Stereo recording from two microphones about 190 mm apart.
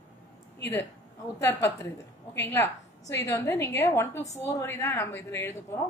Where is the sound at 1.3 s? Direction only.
15° left (ahead or behind).